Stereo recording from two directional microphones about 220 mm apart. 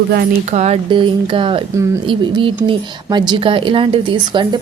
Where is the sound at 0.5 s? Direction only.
30° right (ahead or behind).